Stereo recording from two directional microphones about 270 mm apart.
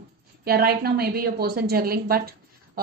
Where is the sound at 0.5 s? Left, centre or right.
Right.